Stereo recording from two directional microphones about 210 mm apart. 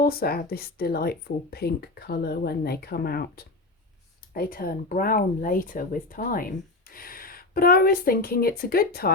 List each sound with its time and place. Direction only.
0.0 s speech: 45° left (ahead or behind)